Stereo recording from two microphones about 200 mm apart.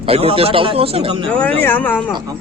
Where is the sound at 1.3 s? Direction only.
5° left (ahead or behind).